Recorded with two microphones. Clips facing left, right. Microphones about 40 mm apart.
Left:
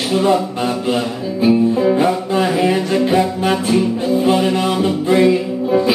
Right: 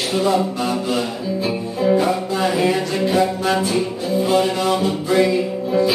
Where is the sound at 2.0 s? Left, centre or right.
Left.